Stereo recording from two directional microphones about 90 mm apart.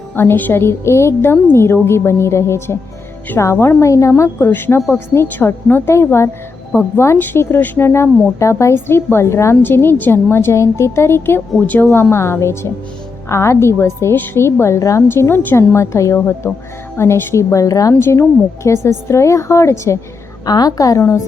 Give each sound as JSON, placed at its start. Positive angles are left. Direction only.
{"t": 0.2, "sound": "a woman's voice", "side_deg": 20}
{"t": 4.2, "sound": "a woman's voice", "side_deg": 25}
{"t": 12.1, "sound": "a woman's voice", "side_deg": 30}
{"t": 20.4, "sound": "a woman's voice", "side_deg": 45}